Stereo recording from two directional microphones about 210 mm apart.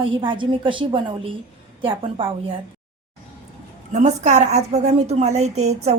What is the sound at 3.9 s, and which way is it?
A woman's voice, 35° right (ahead or behind).